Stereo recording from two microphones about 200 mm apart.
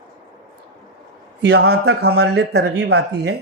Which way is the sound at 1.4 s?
55° right (ahead or behind).